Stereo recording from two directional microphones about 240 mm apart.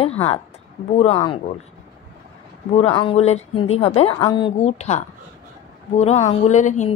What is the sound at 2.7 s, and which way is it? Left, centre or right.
A woman's voice, left.